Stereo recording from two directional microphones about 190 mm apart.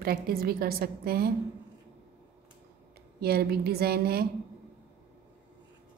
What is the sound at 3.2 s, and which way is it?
A woman's voice, 55° right (ahead or behind).